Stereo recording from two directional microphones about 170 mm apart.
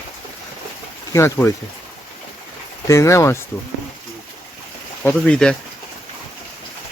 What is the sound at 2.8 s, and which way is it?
Speech, 20° left (ahead or behind).